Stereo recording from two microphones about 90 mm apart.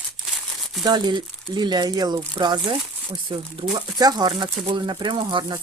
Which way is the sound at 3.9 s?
50° right (ahead or behind).